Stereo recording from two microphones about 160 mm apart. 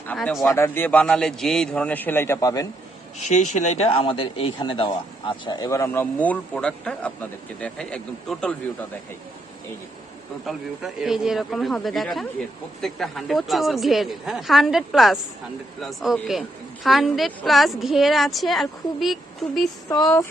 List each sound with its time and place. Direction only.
0.1 s a man's voice: 10° left (ahead or behind)
3.2 s a man's voice: 45° left (ahead or behind); by 8.5 s 5° left (ahead or behind)
10.4 s a woman's voice: centre (ahead or behind)